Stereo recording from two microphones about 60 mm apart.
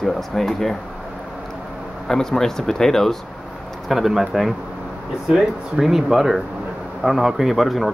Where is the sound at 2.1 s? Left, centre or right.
Centre.